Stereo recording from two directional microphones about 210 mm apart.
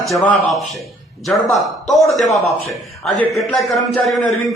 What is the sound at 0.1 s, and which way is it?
A man's voice, centre (ahead or behind).